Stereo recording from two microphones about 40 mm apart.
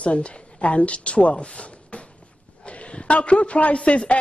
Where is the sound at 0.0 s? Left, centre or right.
Left.